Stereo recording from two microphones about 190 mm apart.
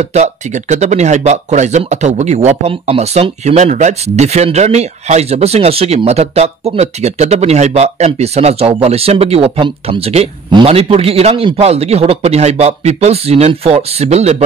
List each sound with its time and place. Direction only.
0.0 s speech: 35° right (ahead or behind)